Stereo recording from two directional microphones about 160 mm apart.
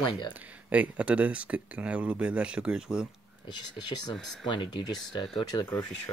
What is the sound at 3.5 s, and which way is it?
Speech, 25° left (ahead or behind).